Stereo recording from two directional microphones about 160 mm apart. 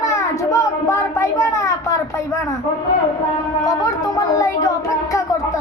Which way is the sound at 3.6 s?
20° left (ahead or behind).